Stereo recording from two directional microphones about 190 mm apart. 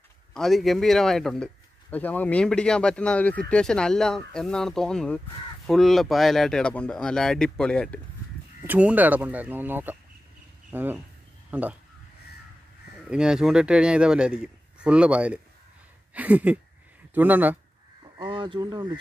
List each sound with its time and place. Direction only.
0.3 s speech: centre (ahead or behind)
8.6 s speech: 10° right (ahead or behind)
13.1 s speech: 5° right (ahead or behind)
16.1 s a sound: 10° right (ahead or behind)
17.1 s speech: 10° right (ahead or behind)
18.1 s speech: 25° right (ahead or behind)